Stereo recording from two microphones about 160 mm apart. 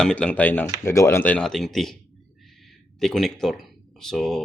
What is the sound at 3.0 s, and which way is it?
Speech, centre (ahead or behind).